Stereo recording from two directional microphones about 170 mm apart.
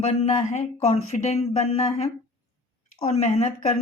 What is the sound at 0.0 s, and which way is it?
Speech, 40° left (ahead or behind).